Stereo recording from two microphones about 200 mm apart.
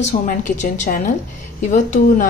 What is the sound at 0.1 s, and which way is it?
Speech, 40° left (ahead or behind).